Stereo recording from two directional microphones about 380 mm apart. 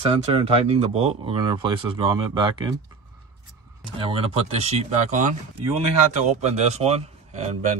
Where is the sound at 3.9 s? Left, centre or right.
Centre.